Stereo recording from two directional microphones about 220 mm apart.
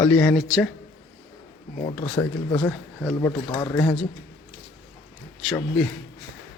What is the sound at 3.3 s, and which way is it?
Speech, 20° left (ahead or behind).